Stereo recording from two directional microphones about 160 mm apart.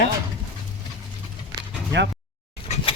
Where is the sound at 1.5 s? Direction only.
90° right.